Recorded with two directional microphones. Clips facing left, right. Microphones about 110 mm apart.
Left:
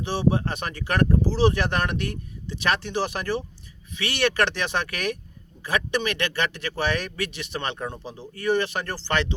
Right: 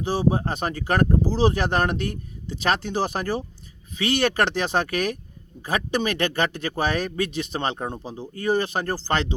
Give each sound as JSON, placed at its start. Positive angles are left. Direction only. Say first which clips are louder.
{"t": 0.0, "sound": "speech", "louder": "right 1 dB", "side_deg": -40}